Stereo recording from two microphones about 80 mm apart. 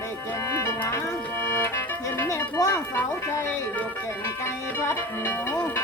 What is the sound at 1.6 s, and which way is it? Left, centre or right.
Music, left.